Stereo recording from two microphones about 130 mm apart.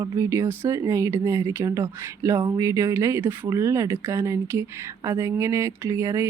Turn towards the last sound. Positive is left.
turn(degrees=-25)  # may be behind; listen again after turning